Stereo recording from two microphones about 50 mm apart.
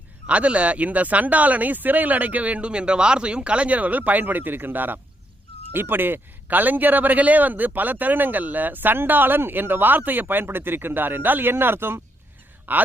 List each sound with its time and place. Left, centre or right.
0.3 s a man's voice: right
12.7 s a man's voice: right